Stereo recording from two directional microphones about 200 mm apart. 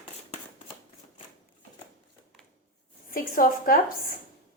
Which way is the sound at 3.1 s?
45° left (ahead or behind).